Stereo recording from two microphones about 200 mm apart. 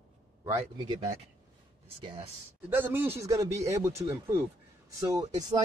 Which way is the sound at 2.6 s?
10° right (ahead or behind).